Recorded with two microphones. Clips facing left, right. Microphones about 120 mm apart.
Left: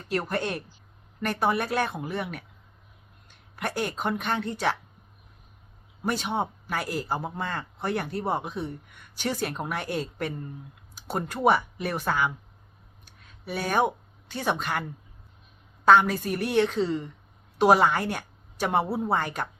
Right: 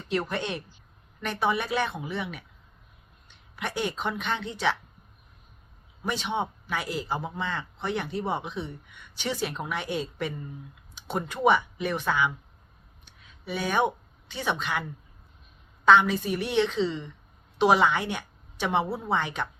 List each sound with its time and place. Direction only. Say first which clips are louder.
0.3 s a woman's voice: left 2 dB; 45° left (ahead or behind)
6.1 s a woman's voice: left 1 dB; 45° left (ahead or behind)
11.4 s a woman's voice: even; 40° left (ahead or behind)
13.1 s a sound: even; 45° left (ahead or behind)
14.3 s a woman's voice: left 2 dB; 45° left (ahead or behind)
18.9 s a woman's voice: left 4 dB; 10° left (ahead or behind)
19.1 s a woman's voice: right 1 dB; 45° left (ahead or behind)